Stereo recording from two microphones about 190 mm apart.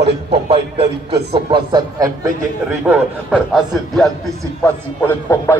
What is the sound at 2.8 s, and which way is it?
A man's voice, 5° right (ahead or behind).